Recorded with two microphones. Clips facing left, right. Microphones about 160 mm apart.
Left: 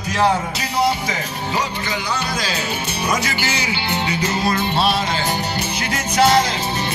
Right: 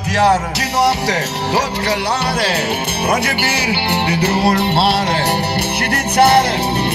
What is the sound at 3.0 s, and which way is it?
Music, 60° right (ahead or behind).